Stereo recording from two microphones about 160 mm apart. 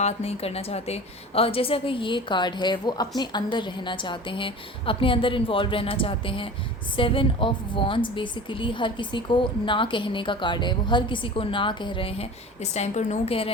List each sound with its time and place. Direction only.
0.0 s a woman's voice: 40° left (ahead or behind)